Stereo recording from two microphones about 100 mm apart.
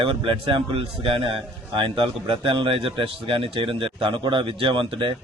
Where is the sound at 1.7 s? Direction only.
55° right (ahead or behind).